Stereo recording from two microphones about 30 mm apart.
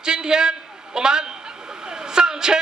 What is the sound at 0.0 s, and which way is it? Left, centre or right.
A man's voice, right.